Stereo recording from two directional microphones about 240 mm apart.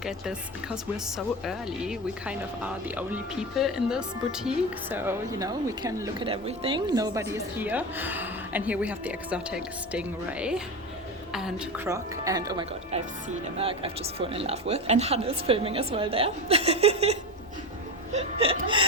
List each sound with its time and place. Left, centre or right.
1.5 s a woman's voice: centre
11.9 s speech: centre